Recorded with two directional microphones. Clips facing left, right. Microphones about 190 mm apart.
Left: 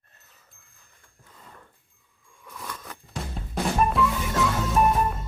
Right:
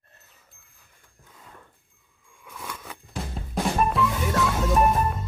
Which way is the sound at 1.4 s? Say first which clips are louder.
Even; centre (ahead or behind).